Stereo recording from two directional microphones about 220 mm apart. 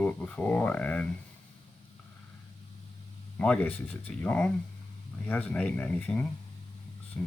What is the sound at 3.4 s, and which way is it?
Speech, 5° left (ahead or behind).